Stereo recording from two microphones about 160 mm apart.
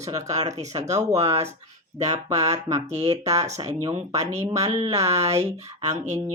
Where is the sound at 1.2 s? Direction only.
40° right (ahead or behind).